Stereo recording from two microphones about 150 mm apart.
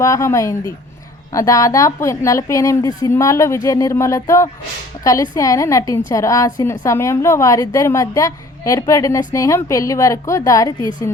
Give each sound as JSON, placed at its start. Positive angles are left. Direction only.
{"t": 0.0, "sound": "a woman's voice", "side_deg": 20}